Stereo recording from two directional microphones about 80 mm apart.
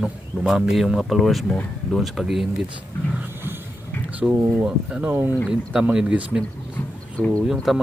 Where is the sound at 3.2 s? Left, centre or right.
Right.